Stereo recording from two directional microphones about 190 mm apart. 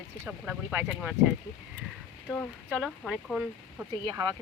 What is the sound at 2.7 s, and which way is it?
Speech, 5° right (ahead or behind).